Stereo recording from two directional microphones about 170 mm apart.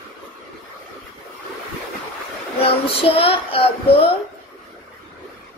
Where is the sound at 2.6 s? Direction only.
35° left (ahead or behind).